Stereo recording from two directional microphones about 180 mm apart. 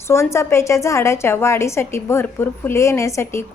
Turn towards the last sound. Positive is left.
turn(degrees=15)  # may be behind; listen again after turning